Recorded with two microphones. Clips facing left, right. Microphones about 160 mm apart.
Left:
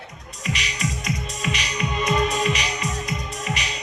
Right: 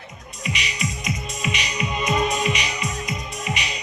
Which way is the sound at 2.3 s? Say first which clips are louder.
Even; 35° left (ahead or behind).